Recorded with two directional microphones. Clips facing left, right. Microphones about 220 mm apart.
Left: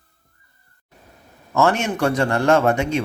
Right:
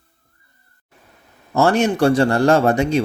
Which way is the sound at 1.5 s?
35° right (ahead or behind).